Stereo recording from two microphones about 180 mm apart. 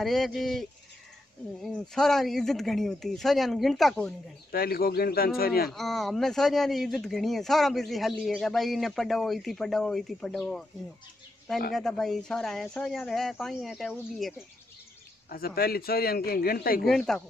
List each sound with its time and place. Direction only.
0.0 s speech: centre (ahead or behind)
4.5 s a man's voice: 55° left (ahead or behind)
5.7 s speech: centre (ahead or behind)
11.7 s speech: centre (ahead or behind)
15.2 s a man's voice: 55° left (ahead or behind)
16.8 s speech: centre (ahead or behind)